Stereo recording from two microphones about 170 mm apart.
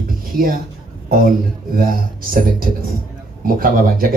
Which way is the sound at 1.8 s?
55° right (ahead or behind).